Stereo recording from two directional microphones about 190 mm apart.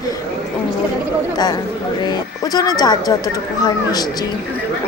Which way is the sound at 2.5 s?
20° left (ahead or behind).